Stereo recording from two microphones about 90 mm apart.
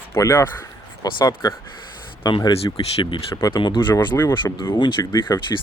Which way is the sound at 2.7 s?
40° left (ahead or behind).